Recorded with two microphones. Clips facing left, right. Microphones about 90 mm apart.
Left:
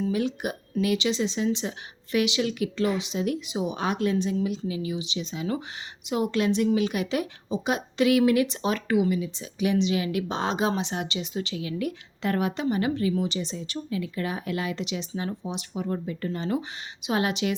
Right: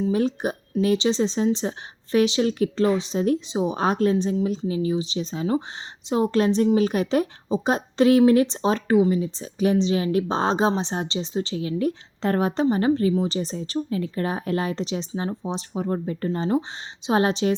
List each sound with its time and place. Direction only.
0.1 s a woman's voice: 35° right (ahead or behind)